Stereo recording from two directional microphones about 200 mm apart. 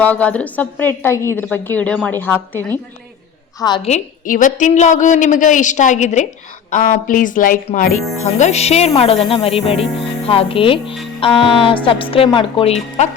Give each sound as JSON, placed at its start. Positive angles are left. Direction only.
{"t": 0.0, "sound": "a woman's voice", "side_deg": 5}
{"t": 3.8, "sound": "a woman's voice", "side_deg": 35}